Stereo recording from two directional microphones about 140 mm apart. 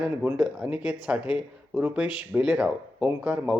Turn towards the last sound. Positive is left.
turn(degrees=-5)  # may be behind; listen again after turning